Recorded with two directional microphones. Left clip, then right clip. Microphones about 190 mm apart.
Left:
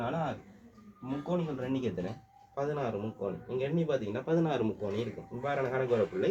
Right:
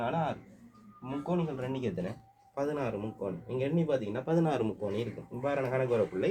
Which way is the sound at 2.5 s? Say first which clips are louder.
Even; 40° right (ahead or behind).